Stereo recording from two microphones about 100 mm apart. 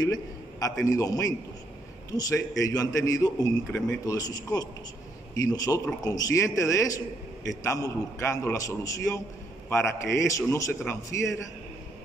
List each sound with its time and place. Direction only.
0.0 s a man's voice: 40° left (ahead or behind)